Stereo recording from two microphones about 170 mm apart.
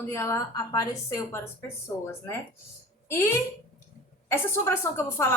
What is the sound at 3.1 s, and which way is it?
A woman's voice, 15° left (ahead or behind).